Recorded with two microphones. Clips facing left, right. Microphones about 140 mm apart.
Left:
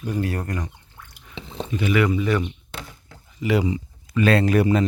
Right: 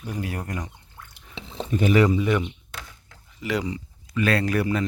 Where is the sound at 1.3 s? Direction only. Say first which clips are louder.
Left 2 dB; centre (ahead or behind).